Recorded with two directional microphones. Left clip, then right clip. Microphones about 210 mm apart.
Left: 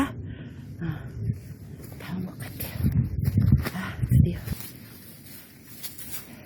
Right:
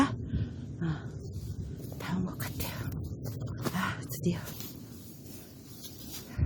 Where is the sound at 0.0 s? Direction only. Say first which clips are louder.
Even; 5° right (ahead or behind).